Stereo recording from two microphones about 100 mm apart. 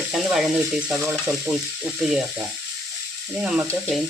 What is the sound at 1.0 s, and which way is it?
Stir, 5° right (ahead or behind).